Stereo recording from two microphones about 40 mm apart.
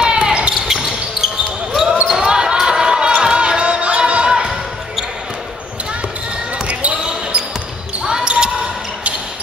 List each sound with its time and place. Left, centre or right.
0.0 s basketball bounce: centre
0.3 s basketball bounce: right
0.7 s basketball bounce: centre
6.7 s a sound: right
8.0 s basketball bounce: centre